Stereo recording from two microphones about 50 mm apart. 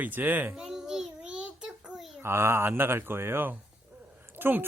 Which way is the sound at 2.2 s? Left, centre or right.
Right.